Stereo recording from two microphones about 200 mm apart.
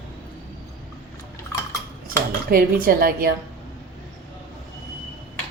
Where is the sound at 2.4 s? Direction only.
45° right (ahead or behind).